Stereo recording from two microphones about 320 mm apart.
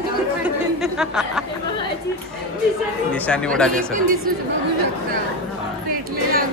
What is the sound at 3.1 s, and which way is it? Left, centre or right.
Speech, centre.